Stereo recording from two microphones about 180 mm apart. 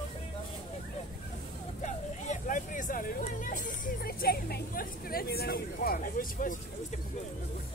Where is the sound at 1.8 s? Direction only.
40° left (ahead or behind).